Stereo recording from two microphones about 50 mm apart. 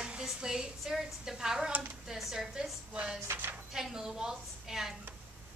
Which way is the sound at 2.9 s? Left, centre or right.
Right.